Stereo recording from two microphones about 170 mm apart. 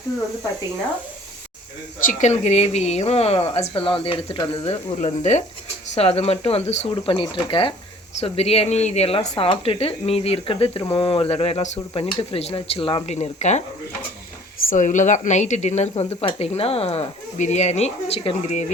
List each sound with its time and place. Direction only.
2.0 s speech: 45° left (ahead or behind)
14.7 s speech: 50° left (ahead or behind)